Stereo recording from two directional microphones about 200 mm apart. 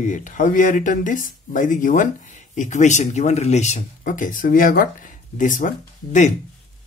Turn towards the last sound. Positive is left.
turn(degrees=35)  # may be behind; listen again after turning